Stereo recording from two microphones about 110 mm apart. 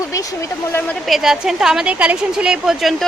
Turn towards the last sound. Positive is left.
turn(degrees=0)  # may be behind; listen again after turning